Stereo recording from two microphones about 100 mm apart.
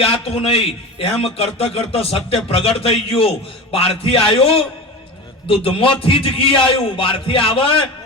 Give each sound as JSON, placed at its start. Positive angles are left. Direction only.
{"t": 0.0, "sound": "a man's voice", "side_deg": 75}